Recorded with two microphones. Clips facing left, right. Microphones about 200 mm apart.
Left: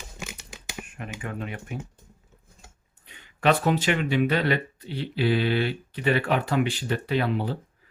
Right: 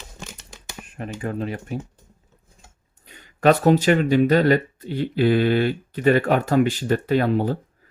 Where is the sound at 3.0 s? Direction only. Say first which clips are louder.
Right 6 dB; 40° right (ahead or behind).